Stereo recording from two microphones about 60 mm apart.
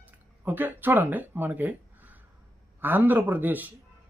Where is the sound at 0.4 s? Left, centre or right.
Right.